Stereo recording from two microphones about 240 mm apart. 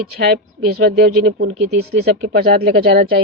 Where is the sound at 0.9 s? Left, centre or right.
Right.